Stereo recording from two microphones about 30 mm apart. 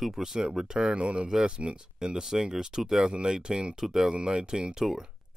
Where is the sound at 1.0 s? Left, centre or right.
Right.